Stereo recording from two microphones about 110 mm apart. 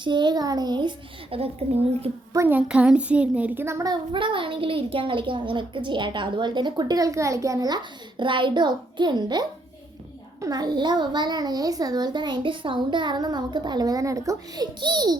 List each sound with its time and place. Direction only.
0.0 s a woman's voice: 45° right (ahead or behind)
1.4 s a woman's voice: 70° right (ahead or behind)
2.5 s a child's voice: 10° right (ahead or behind)
4.1 s a woman's voice: 50° right (ahead or behind)